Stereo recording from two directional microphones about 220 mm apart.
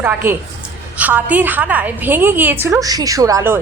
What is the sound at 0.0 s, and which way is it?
A woman's voice, 10° right (ahead or behind).